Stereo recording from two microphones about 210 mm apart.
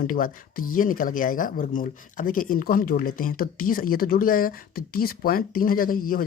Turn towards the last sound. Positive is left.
turn(degrees=40)  # may be behind; listen again after turning